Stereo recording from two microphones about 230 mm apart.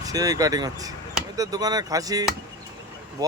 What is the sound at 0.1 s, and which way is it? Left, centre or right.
Speech, centre.